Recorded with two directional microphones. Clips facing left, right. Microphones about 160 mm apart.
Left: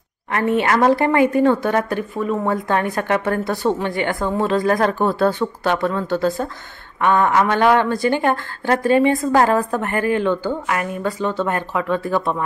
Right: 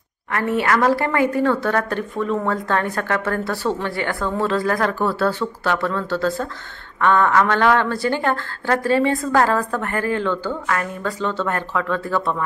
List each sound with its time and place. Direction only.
0.3 s a woman's voice: 20° left (ahead or behind)